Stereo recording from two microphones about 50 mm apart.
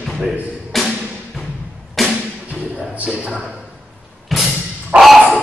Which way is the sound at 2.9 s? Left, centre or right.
Right.